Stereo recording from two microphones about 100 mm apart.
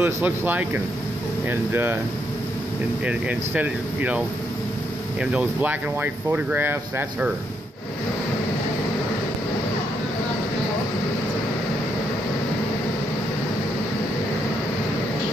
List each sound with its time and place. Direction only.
0.0 s speech: 20° right (ahead or behind)
3.1 s speech: 15° right (ahead or behind)
5.2 s speech: 10° right (ahead or behind)